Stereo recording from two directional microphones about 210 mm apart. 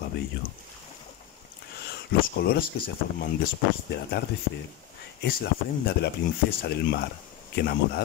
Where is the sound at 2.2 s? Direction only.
45° left (ahead or behind).